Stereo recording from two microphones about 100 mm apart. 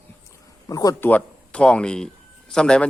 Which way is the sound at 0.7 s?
35° left (ahead or behind).